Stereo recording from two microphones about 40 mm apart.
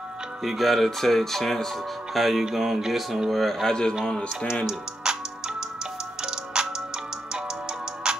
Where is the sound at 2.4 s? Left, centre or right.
Centre.